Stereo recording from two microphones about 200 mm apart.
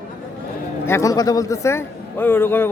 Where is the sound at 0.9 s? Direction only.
15° left (ahead or behind).